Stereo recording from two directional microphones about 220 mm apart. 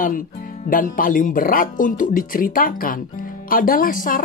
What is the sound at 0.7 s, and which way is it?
Speech, 40° left (ahead or behind).